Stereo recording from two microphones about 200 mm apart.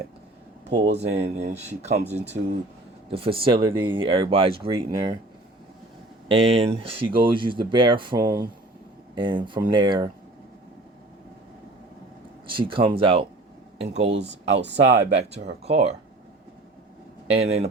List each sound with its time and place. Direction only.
0.7 s speech: 30° right (ahead or behind)
3.1 s speech: 30° right (ahead or behind)
6.2 s speech: 25° right (ahead or behind)
12.5 s speech: 25° right (ahead or behind)
14.1 s speech: 60° right (ahead or behind)
15.6 s speech: 30° right (ahead or behind)
17.3 s speech: 30° right (ahead or behind)